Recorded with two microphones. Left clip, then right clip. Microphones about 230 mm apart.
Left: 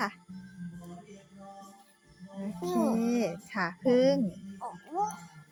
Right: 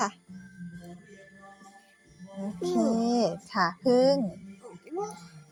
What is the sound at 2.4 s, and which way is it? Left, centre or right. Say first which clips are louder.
A woman's voice: right 3 dB; centre.